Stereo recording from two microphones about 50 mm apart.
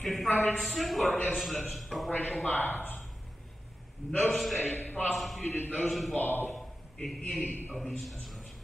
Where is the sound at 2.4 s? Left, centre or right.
Left.